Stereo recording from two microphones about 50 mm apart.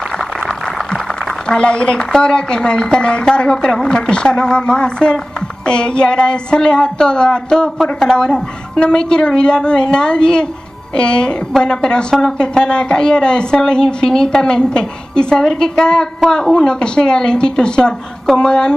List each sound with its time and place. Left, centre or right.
1.6 s a woman's voice: centre